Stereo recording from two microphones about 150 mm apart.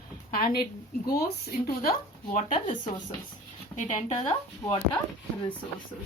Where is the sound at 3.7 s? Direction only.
45° left (ahead or behind).